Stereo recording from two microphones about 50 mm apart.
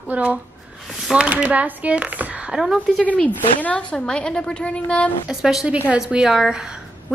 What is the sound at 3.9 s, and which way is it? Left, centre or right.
A woman's voice, centre.